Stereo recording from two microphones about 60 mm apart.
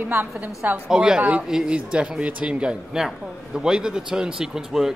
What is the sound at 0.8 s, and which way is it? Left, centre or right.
Speech, centre.